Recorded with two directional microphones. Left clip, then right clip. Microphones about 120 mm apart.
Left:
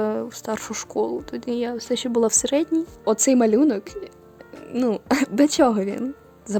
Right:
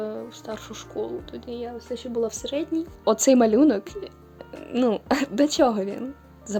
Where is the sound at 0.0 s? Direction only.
70° left (ahead or behind); by 2.6 s 90° left.